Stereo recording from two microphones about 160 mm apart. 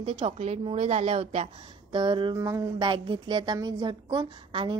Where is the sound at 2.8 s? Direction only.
30° right (ahead or behind).